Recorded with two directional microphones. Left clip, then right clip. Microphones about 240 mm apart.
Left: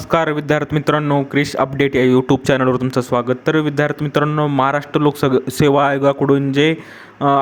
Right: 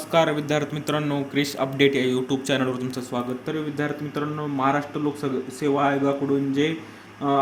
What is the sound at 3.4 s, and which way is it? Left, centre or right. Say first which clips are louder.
Speech: left 11 dB; left.